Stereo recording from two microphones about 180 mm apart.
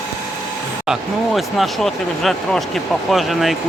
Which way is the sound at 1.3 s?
Centre (ahead or behind).